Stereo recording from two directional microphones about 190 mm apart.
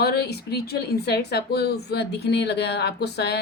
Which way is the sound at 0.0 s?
55° left (ahead or behind).